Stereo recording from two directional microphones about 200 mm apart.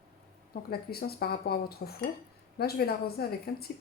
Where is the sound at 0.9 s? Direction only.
50° left (ahead or behind).